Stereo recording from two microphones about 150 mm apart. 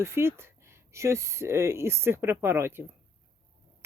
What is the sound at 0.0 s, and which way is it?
Speech, 15° right (ahead or behind).